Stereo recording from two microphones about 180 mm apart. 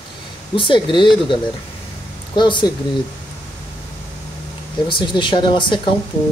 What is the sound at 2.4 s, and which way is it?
Speech, 25° left (ahead or behind).